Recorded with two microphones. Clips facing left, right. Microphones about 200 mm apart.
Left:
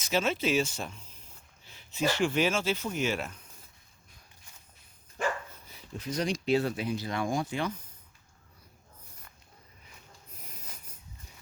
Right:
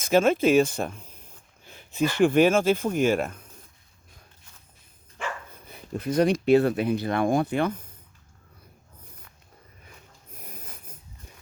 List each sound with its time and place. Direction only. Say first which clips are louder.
0.0 s speech: right 9 dB; 50° right (ahead or behind)
5.6 s speech: right 10 dB; 55° right (ahead or behind)
10.3 s snort: right 7 dB; 55° right (ahead or behind)